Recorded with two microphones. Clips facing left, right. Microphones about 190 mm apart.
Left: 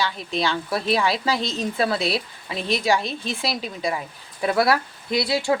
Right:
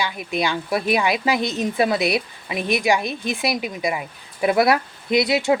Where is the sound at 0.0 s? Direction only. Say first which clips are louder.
Right 1 dB; 15° right (ahead or behind).